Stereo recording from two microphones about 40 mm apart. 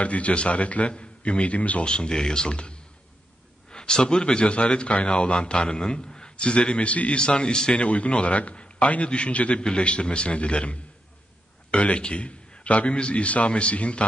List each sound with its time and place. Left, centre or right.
0.0 s a man's voice: left
1.9 s speech: centre
7.7 s a man's voice: left